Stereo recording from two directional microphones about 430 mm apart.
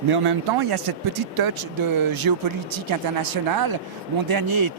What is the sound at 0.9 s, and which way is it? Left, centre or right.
Speech, right.